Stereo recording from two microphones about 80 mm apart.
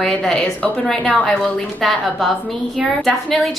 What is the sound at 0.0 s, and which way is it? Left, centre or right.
A woman's voice, centre.